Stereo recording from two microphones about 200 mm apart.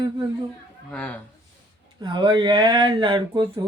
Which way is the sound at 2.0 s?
20° right (ahead or behind).